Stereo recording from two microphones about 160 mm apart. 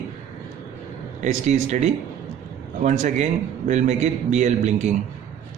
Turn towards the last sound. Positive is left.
turn(degrees=-45)  # may be behind; listen again after turning